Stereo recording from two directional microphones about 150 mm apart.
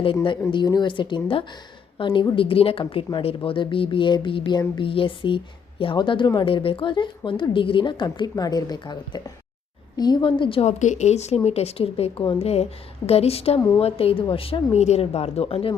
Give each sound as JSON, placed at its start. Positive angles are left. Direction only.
{"t": 0.5, "sound": "a woman's voice", "side_deg": 30}